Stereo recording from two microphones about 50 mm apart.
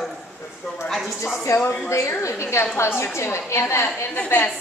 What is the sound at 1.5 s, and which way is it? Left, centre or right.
Speech, left.